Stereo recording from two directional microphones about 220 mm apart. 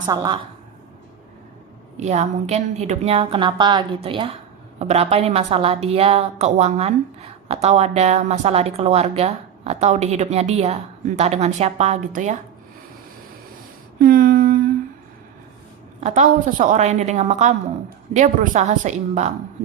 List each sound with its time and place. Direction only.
0.1 s a woman's voice: 15° right (ahead or behind)
2.0 s a woman's voice: 30° right (ahead or behind)
14.0 s a sound: 40° right (ahead or behind)
16.0 s a woman's voice: 30° right (ahead or behind)